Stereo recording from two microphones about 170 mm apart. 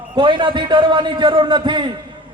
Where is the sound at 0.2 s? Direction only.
30° right (ahead or behind).